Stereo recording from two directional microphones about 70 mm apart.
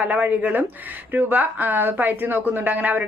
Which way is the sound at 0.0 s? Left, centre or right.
Right.